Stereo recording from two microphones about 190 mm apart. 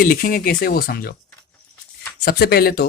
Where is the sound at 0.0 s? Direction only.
45° left (ahead or behind).